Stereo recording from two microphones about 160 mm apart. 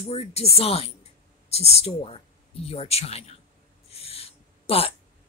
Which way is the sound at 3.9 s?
40° left (ahead or behind).